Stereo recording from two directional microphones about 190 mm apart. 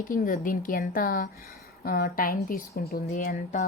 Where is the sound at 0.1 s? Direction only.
45° left (ahead or behind).